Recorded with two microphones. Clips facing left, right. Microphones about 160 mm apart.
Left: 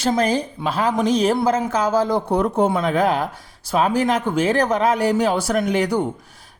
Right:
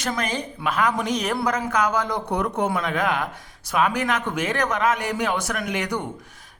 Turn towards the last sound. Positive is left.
turn(degrees=30)  # may be behind; listen again after turning